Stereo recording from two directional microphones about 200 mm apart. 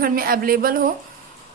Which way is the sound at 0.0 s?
45° right (ahead or behind).